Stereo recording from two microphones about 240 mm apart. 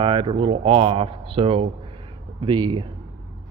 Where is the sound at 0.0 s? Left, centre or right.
Right.